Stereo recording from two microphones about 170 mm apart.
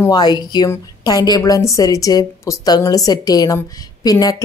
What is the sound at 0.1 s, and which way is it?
A woman's voice, 25° left (ahead or behind).